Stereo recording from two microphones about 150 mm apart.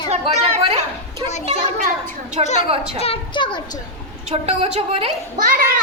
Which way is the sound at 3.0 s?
35° left (ahead or behind).